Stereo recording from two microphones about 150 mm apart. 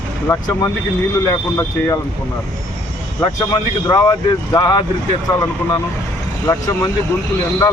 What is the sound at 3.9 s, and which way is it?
Speech, 25° left (ahead or behind).